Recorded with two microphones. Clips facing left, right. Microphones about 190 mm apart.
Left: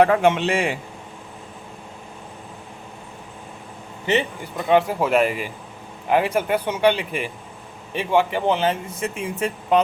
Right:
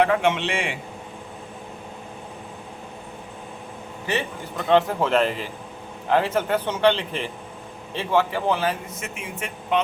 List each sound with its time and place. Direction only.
0.0 s a man's voice: 45° left (ahead or behind)
4.0 s speech: 20° left (ahead or behind); by 9.8 s 35° left (ahead or behind)